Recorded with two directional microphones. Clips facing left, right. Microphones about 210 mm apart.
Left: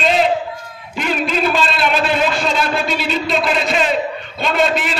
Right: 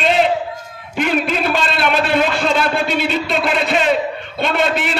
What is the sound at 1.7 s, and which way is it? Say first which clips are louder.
A man's voice: right 1 dB; 55° right (ahead or behind).